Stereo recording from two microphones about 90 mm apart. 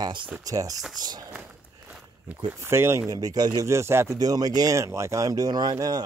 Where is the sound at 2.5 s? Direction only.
30° right (ahead or behind).